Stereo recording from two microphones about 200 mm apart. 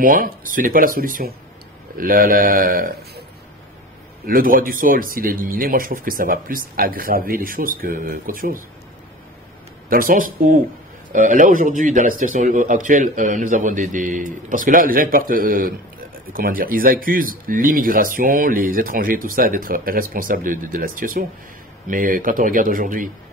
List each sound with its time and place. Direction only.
0.0 s speech: 45° right (ahead or behind)
4.3 s speech: 45° right (ahead or behind)
9.8 s speech: 45° right (ahead or behind)